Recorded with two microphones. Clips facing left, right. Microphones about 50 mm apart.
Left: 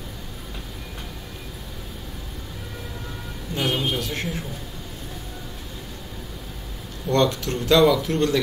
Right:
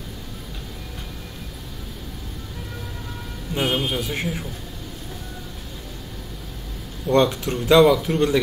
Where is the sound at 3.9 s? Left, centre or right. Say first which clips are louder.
Right 1 dB; centre.